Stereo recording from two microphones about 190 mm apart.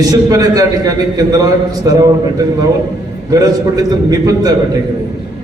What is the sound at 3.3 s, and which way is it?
A man's voice, 20° right (ahead or behind).